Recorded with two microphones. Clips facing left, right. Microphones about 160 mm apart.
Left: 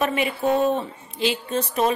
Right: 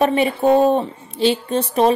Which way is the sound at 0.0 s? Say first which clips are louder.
Right 6 dB; 35° right (ahead or behind).